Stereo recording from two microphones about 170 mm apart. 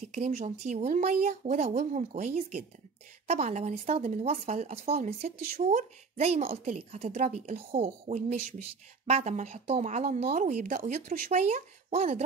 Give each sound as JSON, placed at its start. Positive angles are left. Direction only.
{"t": 0.0, "sound": "speech", "side_deg": -45}